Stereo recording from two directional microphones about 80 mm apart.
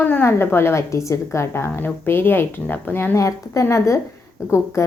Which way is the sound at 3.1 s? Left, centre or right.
Left.